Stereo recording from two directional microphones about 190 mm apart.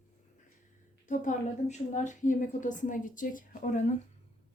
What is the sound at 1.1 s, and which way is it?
A woman's voice, 40° left (ahead or behind).